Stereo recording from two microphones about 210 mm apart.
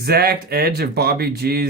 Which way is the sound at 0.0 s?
50° right (ahead or behind).